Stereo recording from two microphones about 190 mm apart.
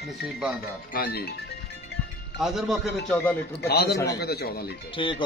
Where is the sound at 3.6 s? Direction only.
60° left (ahead or behind).